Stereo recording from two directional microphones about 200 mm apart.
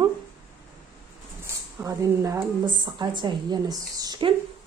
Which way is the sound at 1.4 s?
15° right (ahead or behind).